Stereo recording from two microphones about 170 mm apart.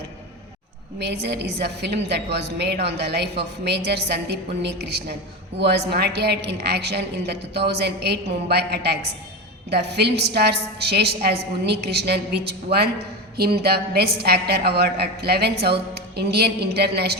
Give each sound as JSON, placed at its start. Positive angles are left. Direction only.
{"t": 0.9, "sound": "a woman's voice", "side_deg": -75}